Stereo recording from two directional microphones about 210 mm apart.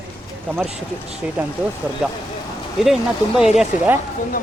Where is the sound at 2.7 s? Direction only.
Centre (ahead or behind).